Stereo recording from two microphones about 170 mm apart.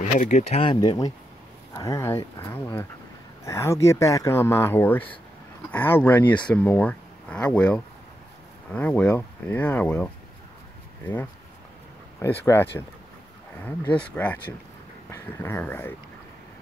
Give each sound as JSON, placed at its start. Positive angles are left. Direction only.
{"t": 0.2, "sound": "speech", "side_deg": 40}
{"t": 12.2, "sound": "speech", "side_deg": 15}